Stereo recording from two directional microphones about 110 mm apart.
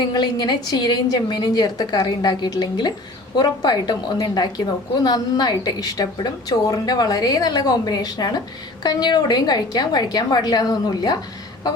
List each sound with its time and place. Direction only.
0.1 s a woman's voice: 40° left (ahead or behind)